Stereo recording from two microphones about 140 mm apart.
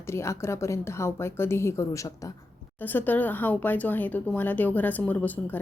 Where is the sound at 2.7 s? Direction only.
15° left (ahead or behind).